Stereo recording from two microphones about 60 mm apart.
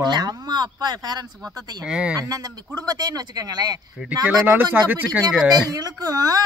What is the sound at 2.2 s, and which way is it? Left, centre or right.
Speech, right.